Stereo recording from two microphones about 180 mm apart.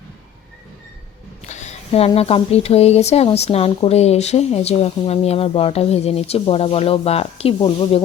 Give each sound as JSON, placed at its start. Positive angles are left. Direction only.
{"t": 1.5, "sound": "speech", "side_deg": 40}